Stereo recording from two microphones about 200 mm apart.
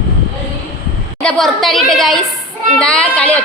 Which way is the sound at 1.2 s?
5° left (ahead or behind).